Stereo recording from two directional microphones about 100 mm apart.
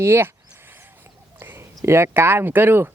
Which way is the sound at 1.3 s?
25° right (ahead or behind).